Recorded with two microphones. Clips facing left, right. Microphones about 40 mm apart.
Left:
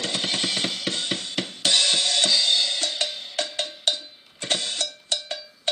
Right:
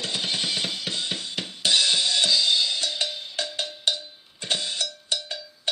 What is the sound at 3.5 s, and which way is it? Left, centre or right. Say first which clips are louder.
Cowbell: right 2 dB; left.